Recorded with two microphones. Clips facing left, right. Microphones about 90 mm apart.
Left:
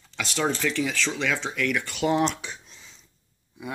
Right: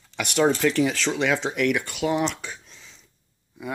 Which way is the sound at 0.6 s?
20° right (ahead or behind).